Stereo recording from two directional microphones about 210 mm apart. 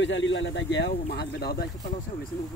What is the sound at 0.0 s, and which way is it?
Speech, 60° left (ahead or behind).